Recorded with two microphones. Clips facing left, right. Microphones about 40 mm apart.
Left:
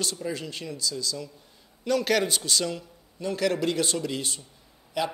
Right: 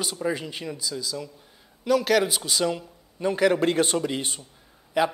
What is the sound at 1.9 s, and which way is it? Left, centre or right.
Speech, centre.